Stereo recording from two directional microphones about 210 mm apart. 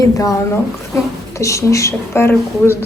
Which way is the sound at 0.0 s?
15° left (ahead or behind).